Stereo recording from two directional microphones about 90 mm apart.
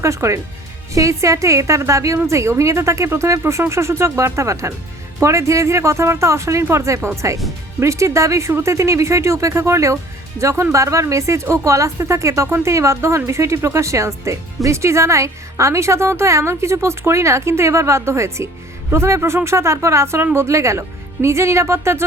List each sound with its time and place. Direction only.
0.0 s speech: 35° right (ahead or behind)